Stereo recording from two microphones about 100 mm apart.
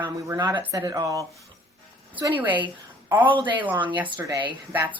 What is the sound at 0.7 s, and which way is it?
Speech, 40° right (ahead or behind).